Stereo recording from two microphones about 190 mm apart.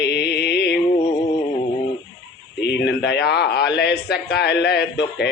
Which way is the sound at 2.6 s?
65° left (ahead or behind).